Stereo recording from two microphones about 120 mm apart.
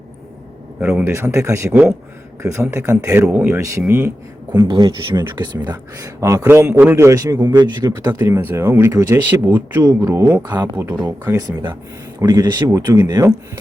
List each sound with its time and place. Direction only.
0.8 s a man's voice: 10° right (ahead or behind)
1.1 s a man's voice: 25° right (ahead or behind)
3.2 s a man's voice: 5° right (ahead or behind)
3.5 s a man's voice: 20° right (ahead or behind)
4.5 s speech: 35° right (ahead or behind)
5.6 s a man's voice: 30° right (ahead or behind)
9.5 s a man's voice: 15° right (ahead or behind)
9.8 s a man's voice: 25° right (ahead or behind)